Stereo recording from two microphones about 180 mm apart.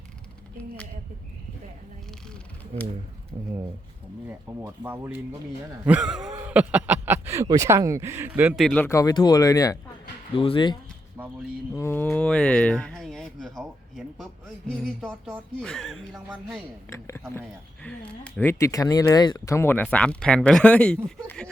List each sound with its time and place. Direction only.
4.3 s a man's voice: 10° right (ahead or behind)
6.3 s a sound: 10° right (ahead or behind)
7.4 s speech: 20° right (ahead or behind)
8.6 s speech: 10° left (ahead or behind)
10.3 s speech: 30° left (ahead or behind)
11.2 s a sound: 10° right (ahead or behind)
11.7 s a man's voice: 15° left (ahead or behind)
16.9 s speech: 15° left (ahead or behind)